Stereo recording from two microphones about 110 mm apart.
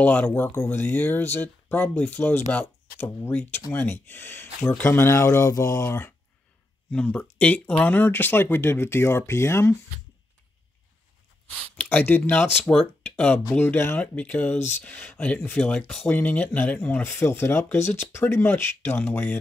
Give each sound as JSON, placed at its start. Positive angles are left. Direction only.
{"t": 0.0, "sound": "speech", "side_deg": 15}
{"t": 6.9, "sound": "speech", "side_deg": 10}
{"t": 11.8, "sound": "speech", "side_deg": 15}